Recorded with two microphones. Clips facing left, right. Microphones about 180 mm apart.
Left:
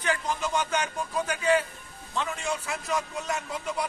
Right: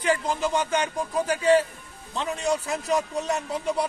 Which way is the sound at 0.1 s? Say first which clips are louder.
Right 4 dB; 30° right (ahead or behind).